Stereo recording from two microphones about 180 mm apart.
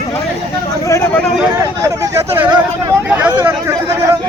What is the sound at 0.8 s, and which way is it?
Speech, 15° left (ahead or behind).